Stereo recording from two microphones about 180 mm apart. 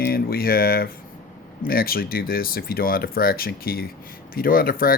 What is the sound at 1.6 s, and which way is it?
Speech, 55° left (ahead or behind).